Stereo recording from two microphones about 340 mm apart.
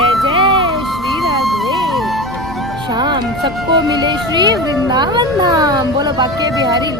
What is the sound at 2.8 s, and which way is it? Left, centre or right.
Music, centre.